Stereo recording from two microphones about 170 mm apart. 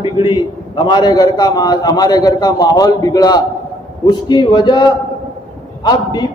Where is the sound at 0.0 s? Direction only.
30° left (ahead or behind).